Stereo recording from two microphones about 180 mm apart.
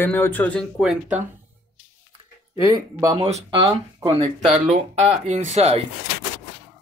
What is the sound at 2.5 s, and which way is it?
Speech, 20° right (ahead or behind).